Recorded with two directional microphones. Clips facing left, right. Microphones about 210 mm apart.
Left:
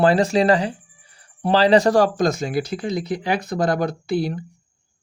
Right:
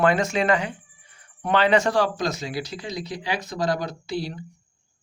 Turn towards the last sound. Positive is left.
turn(degrees=55)  # may be behind; listen again after turning